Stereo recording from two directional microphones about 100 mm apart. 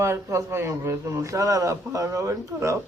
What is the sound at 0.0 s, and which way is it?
A man's voice, 30° right (ahead or behind).